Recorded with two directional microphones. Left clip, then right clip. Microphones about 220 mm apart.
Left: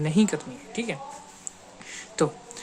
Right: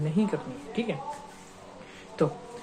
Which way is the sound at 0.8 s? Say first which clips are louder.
Even; 20° left (ahead or behind).